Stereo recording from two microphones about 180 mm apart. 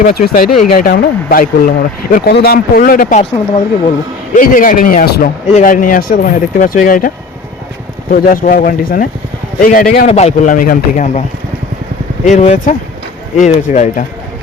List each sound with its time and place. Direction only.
0.0 s speech: 55° left (ahead or behind)
4.4 s speech: 50° left (ahead or behind)
8.1 s speech: 50° left (ahead or behind)
10.1 s speech: 35° left (ahead or behind)
12.2 s speech: 40° left (ahead or behind)